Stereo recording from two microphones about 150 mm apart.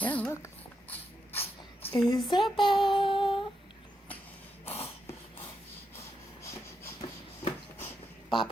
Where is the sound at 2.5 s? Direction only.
30° left (ahead or behind).